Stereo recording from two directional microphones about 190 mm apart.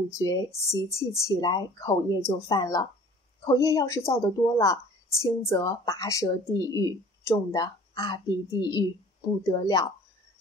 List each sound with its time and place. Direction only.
0.2 s a woman's voice: 15° left (ahead or behind)